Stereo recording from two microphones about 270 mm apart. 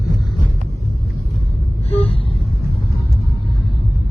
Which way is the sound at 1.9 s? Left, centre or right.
Left.